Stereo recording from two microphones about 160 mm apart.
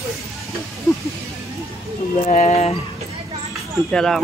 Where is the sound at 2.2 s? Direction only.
40° left (ahead or behind).